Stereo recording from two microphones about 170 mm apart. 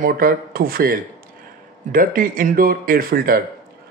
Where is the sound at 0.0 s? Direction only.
60° right (ahead or behind).